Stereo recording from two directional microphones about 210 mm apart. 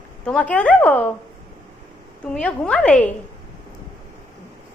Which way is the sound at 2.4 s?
5° left (ahead or behind).